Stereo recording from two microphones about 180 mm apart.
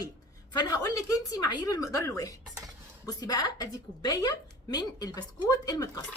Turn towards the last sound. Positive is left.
turn(degrees=20)  # may be behind; listen again after turning